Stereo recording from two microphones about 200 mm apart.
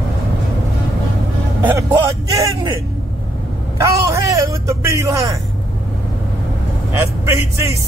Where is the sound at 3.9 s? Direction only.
15° right (ahead or behind).